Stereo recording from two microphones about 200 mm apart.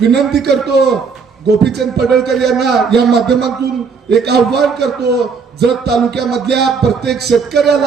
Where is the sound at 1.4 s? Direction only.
55° right (ahead or behind).